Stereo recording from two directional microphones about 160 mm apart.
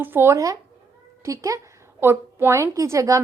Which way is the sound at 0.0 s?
15° right (ahead or behind).